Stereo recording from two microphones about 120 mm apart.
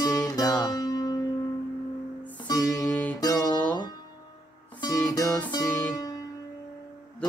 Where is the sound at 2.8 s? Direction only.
15° left (ahead or behind).